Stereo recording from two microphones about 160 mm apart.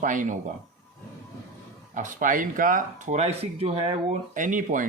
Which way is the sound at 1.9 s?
55° right (ahead or behind).